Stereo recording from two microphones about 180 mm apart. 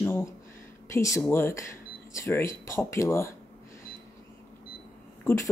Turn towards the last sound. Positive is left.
turn(degrees=15)  # may be behind; listen again after turning